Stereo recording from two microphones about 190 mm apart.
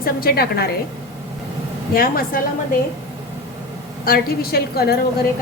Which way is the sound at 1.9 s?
50° left (ahead or behind).